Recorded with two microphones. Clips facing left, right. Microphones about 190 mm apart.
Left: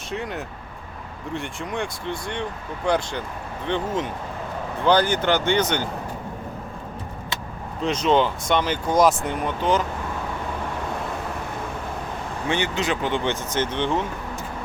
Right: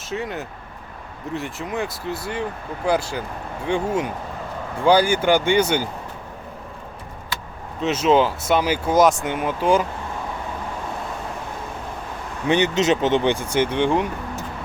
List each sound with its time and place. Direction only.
0.1 s speech: centre (ahead or behind)
7.8 s speech: 5° right (ahead or behind)
12.5 s speech: 20° right (ahead or behind)